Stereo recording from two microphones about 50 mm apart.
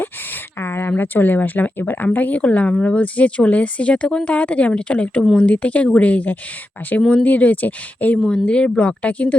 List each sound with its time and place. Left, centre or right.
0.6 s speech: left
8.3 s speech: left